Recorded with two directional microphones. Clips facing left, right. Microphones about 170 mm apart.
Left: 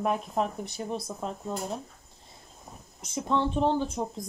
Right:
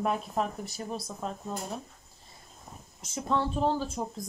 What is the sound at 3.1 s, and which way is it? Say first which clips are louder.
Speech: left 2 dB; 20° left (ahead or behind).